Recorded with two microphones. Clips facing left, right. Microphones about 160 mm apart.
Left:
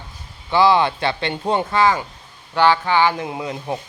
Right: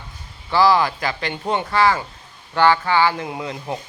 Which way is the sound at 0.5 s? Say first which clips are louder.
Left 1 dB; 25° left (ahead or behind).